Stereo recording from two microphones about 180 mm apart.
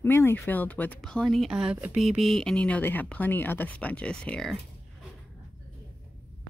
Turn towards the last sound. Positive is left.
turn(degrees=5)  # may be behind; listen again after turning